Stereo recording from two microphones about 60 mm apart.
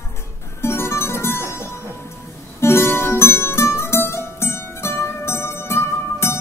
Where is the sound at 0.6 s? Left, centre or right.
Left.